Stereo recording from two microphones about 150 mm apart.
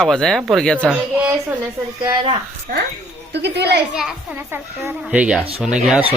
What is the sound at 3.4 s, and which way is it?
Speech, 90° right.